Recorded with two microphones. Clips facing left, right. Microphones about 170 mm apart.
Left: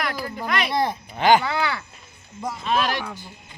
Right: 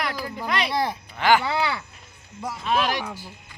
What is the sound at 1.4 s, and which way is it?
Speech, 25° right (ahead or behind).